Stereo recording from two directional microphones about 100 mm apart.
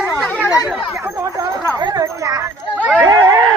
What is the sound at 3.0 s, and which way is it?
Snicker, 30° right (ahead or behind).